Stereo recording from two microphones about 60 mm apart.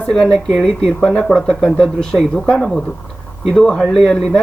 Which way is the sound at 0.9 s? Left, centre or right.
Centre.